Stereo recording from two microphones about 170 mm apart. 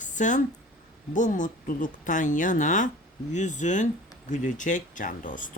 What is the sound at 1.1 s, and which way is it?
A woman's voice, 50° left (ahead or behind).